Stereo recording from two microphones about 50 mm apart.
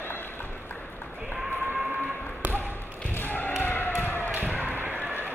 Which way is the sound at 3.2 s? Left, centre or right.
Left.